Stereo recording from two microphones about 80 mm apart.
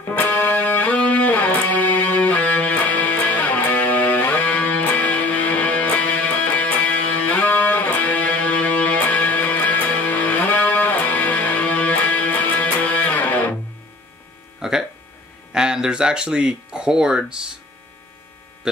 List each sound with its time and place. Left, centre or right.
0.0 s music: left
14.6 s a sound: centre
15.5 s speech: centre